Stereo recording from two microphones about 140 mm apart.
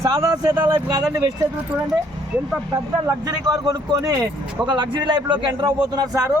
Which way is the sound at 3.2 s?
25° right (ahead or behind).